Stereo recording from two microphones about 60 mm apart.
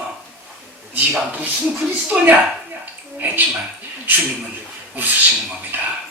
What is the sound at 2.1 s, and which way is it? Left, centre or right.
Speech, centre.